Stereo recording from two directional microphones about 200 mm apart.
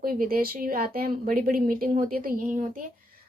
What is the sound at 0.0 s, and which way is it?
A woman's voice, 45° right (ahead or behind).